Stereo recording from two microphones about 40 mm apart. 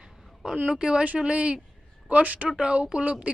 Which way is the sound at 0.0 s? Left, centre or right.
Centre.